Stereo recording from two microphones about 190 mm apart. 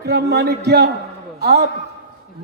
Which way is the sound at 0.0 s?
60° right (ahead or behind).